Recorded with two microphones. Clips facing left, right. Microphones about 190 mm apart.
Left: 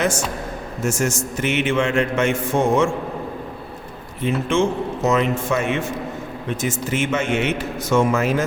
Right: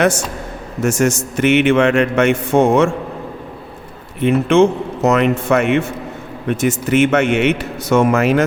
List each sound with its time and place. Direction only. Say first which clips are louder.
0.8 s a man's voice: right 6 dB; 65° right (ahead or behind)
4.2 s a man's voice: right 8 dB; 65° right (ahead or behind)